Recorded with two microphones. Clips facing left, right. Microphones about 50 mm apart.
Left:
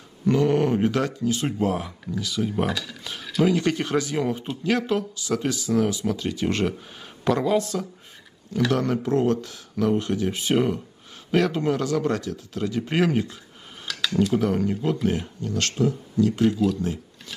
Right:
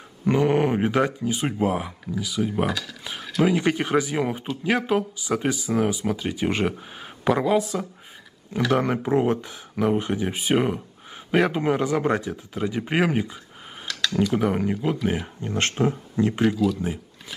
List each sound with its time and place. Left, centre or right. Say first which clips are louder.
0.3 s speech: even; right